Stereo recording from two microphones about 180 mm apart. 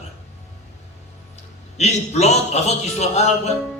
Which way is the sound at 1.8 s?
35° left (ahead or behind).